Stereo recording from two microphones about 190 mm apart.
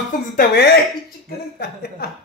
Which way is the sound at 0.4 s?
60° left (ahead or behind).